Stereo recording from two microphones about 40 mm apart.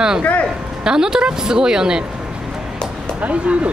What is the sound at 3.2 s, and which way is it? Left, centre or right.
Speech, right.